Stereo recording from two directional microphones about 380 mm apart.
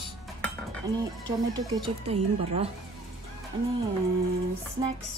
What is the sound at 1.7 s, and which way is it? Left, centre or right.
Speech, centre.